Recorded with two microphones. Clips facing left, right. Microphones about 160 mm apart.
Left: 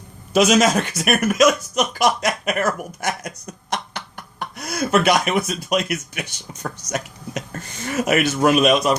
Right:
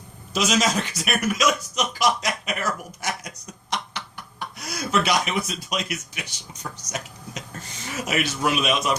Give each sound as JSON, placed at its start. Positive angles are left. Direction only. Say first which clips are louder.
{"t": 0.3, "sound": "speech", "louder": "left 7 dB", "side_deg": 55}